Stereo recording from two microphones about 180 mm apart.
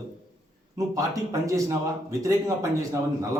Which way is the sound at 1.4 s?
20° right (ahead or behind).